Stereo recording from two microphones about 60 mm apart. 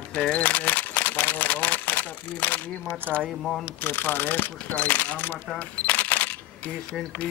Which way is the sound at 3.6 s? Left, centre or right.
Left.